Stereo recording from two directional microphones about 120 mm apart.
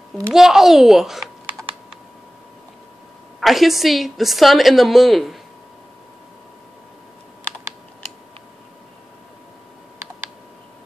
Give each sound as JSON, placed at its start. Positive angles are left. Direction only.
{"t": 0.3, "sound": "a woman's voice", "side_deg": -5}
{"t": 3.3, "sound": "a woman's voice", "side_deg": 0}